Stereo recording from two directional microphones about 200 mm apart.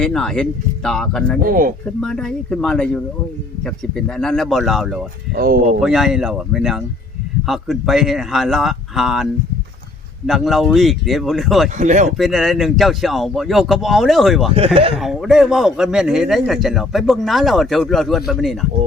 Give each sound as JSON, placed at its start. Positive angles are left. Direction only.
{"t": 0.0, "sound": "a man's voice", "side_deg": 0}
{"t": 1.4, "sound": "speech", "side_deg": -45}
{"t": 2.0, "sound": "a man's voice", "side_deg": 5}
{"t": 5.3, "sound": "speech", "side_deg": -50}
{"t": 5.8, "sound": "a man's voice", "side_deg": 0}
{"t": 11.8, "sound": "speech", "side_deg": -35}
{"t": 12.1, "sound": "a man's voice", "side_deg": 0}